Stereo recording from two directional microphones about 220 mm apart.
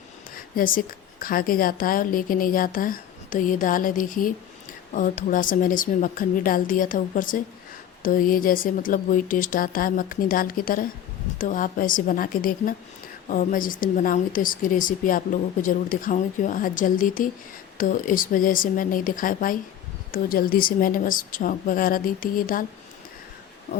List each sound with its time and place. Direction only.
0.3 s a woman's voice: 40° left (ahead or behind)